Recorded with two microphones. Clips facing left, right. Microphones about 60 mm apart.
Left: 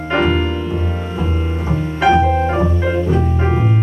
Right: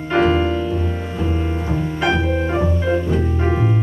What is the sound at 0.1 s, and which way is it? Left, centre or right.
Music, left.